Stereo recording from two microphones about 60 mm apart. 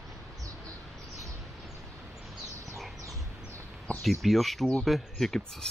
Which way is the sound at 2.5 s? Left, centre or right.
Right.